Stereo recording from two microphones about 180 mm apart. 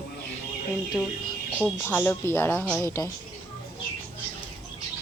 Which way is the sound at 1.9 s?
10° left (ahead or behind).